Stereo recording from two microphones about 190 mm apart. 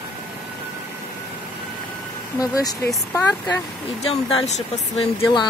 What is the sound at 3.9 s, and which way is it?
Speech, 35° left (ahead or behind).